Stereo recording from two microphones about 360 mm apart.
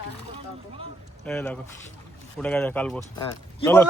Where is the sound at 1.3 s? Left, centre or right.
Centre.